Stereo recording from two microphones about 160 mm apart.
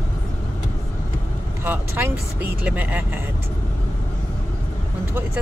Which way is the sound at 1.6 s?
15° right (ahead or behind).